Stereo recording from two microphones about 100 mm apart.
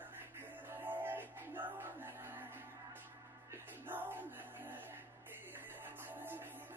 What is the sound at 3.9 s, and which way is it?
Music, 20° right (ahead or behind).